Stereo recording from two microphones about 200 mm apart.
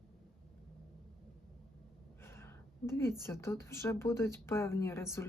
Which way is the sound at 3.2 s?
15° left (ahead or behind).